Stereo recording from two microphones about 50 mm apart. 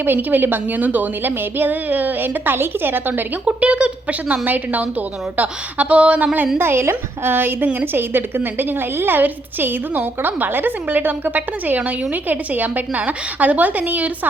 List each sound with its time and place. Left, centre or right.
0.0 s a woman's voice: right
3.4 s a woman's voice: right
6.6 s a woman's voice: right
7.3 s a woman's voice: right